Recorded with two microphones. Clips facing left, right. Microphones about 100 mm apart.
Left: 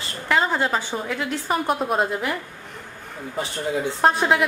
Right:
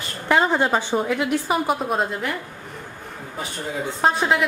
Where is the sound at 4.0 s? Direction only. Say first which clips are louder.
Even; centre (ahead or behind).